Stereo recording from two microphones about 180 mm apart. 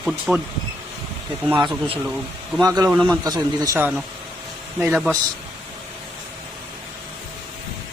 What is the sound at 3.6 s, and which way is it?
Speech, 15° right (ahead or behind).